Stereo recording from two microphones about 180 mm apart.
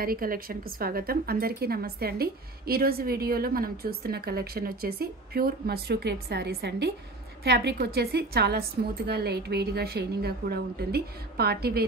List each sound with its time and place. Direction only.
0.0 s speech: 55° right (ahead or behind)